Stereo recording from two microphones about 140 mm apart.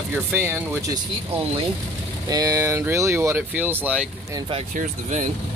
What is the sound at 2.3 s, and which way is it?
Speech, 25° right (ahead or behind).